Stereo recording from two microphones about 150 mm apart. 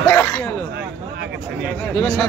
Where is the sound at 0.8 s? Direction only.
90° right.